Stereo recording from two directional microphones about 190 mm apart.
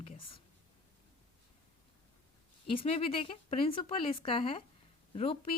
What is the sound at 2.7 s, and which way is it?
Speech, 30° left (ahead or behind).